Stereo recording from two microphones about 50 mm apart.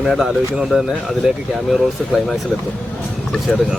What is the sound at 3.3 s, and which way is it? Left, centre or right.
Speech, centre.